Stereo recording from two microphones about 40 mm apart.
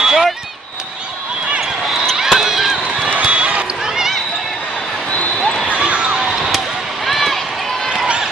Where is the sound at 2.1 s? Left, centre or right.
Centre.